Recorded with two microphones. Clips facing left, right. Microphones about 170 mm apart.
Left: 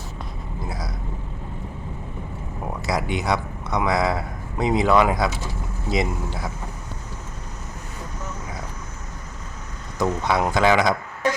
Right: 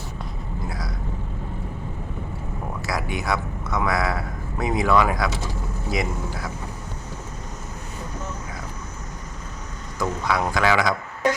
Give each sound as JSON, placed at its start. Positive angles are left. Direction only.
{"t": 0.7, "sound": "vehicle", "side_deg": 20}
{"t": 2.8, "sound": "a man's voice", "side_deg": 20}
{"t": 10.0, "sound": "a man's voice", "side_deg": 25}